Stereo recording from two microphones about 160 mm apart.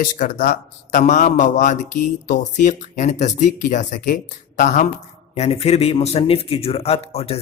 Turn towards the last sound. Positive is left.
turn(degrees=40)  # may be behind; listen again after turning